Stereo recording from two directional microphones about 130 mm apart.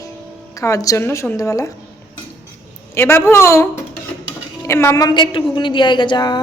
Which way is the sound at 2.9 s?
20° left (ahead or behind).